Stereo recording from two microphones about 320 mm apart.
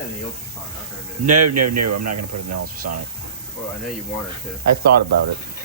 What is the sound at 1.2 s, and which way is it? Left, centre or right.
Speech, right.